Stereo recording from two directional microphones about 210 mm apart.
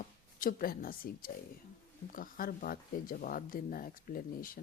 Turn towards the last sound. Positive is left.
turn(degrees=40)  # may be behind; listen again after turning